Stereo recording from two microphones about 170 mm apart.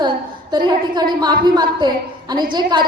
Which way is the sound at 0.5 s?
25° right (ahead or behind).